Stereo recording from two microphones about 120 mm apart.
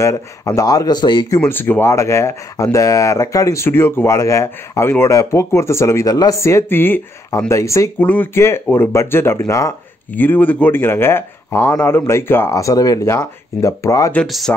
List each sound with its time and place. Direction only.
0.6 s speech: 30° left (ahead or behind)
1.4 s speech: 15° left (ahead or behind)
8.0 s speech: 15° left (ahead or behind)
10.1 s speech: 15° left (ahead or behind)
14.2 s speech: centre (ahead or behind)